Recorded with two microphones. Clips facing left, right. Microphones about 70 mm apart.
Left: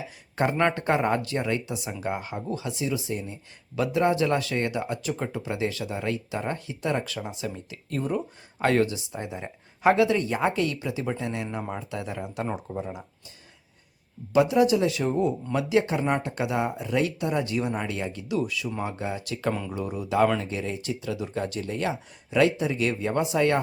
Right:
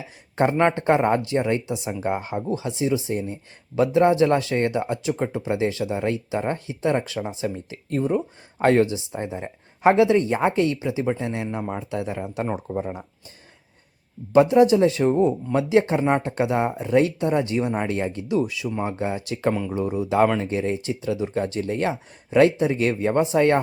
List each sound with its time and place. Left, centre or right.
0.6 s speech: right
14.3 s speech: right